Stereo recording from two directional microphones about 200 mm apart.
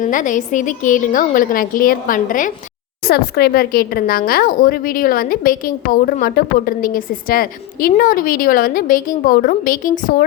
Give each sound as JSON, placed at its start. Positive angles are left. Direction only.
{"t": 0.0, "sound": "a woman's voice", "side_deg": 40}